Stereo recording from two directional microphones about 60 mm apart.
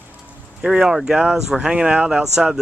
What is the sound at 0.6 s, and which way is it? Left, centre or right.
Speech, centre.